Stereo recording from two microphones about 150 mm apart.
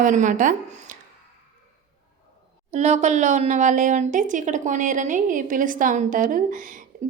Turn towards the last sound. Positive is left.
turn(degrees=-60)  # may be behind; listen again after turning